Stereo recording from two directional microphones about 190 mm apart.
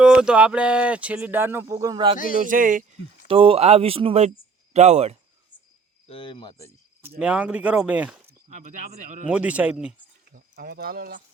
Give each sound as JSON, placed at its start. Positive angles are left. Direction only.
{"t": 0.0, "sound": "speech", "side_deg": -5}
{"t": 2.4, "sound": "speech", "side_deg": -45}
{"t": 3.2, "sound": "speech", "side_deg": -30}
{"t": 6.1, "sound": "speech", "side_deg": 25}
{"t": 7.2, "sound": "speech", "side_deg": -5}
{"t": 8.4, "sound": "speech", "side_deg": -40}
{"t": 9.2, "sound": "speech", "side_deg": -5}
{"t": 10.3, "sound": "speech", "side_deg": -50}